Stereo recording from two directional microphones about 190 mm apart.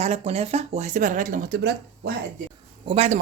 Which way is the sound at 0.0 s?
35° right (ahead or behind).